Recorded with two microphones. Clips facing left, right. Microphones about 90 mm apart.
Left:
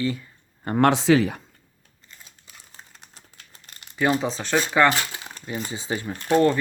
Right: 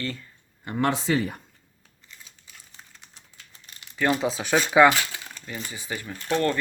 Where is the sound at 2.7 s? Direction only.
50° left (ahead or behind).